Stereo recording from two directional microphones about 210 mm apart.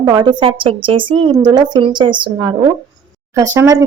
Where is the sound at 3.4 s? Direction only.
15° right (ahead or behind).